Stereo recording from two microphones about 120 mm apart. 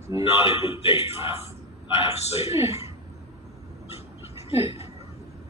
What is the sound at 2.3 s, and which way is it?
Speech, 60° left (ahead or behind).